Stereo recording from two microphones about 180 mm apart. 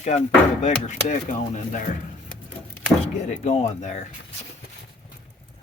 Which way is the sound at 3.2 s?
40° left (ahead or behind).